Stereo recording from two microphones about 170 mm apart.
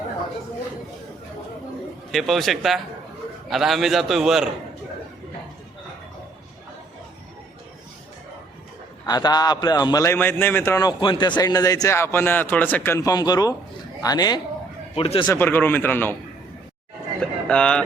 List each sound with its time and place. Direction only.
2.1 s a man's voice: centre (ahead or behind)
9.0 s a man's voice: 25° left (ahead or behind)
14.9 s speech: 35° left (ahead or behind)
15.3 s a man's voice: 10° left (ahead or behind)
17.2 s a sound: 5° left (ahead or behind)